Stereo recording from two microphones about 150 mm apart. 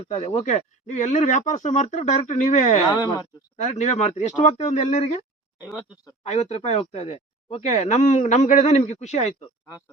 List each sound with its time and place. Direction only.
0.0 s speech: 50° left (ahead or behind)
6.2 s speech: 50° left (ahead or behind)